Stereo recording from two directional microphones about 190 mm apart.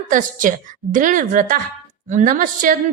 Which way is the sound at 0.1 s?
45° right (ahead or behind).